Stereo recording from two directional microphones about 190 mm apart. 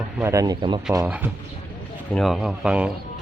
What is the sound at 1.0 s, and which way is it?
Speech, 10° right (ahead or behind).